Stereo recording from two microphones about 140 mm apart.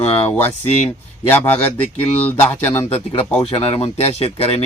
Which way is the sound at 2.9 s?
40° left (ahead or behind).